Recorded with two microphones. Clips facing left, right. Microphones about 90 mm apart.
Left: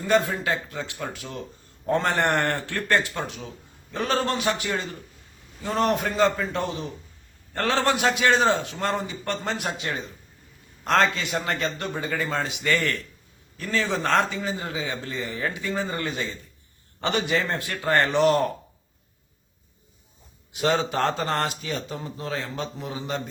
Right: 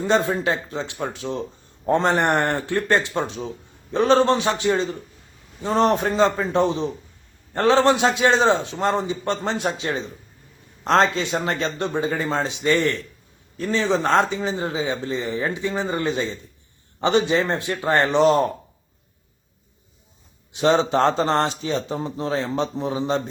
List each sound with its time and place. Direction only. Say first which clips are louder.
0.0 s a man's voice: right 2 dB; 25° right (ahead or behind)
20.5 s a man's voice: right 5 dB; 25° right (ahead or behind)